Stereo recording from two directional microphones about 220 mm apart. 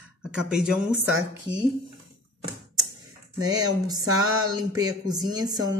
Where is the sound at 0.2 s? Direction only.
5° right (ahead or behind).